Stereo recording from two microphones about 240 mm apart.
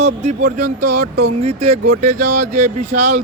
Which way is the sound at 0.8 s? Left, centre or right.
Right.